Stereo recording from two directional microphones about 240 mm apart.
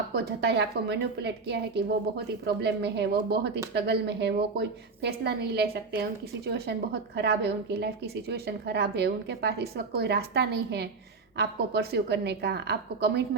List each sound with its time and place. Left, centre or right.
0.1 s a woman's voice: right